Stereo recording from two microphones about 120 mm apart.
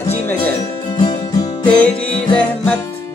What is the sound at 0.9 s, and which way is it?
Music, 35° left (ahead or behind).